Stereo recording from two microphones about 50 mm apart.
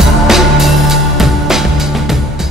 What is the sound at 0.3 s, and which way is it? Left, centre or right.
Music, centre.